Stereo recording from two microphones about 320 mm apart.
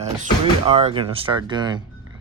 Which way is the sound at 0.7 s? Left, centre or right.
Centre.